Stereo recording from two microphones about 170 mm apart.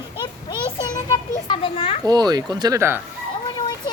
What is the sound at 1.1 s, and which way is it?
Children playing, 30° left (ahead or behind).